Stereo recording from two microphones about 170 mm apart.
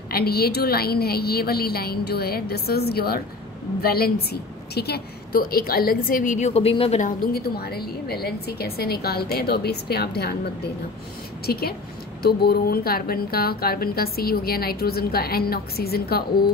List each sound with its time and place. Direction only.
0.1 s a woman's voice: 65° left (ahead or behind)